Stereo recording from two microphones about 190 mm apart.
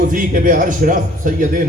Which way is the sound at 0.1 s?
45° right (ahead or behind).